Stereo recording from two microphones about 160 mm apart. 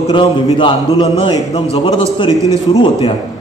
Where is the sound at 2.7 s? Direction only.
35° left (ahead or behind).